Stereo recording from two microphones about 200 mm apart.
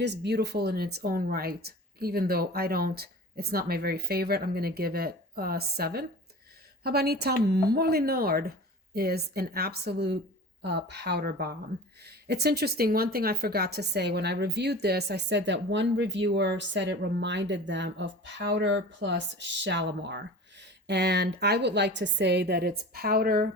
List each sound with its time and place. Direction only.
0.0 s a woman's voice: 60° right (ahead or behind)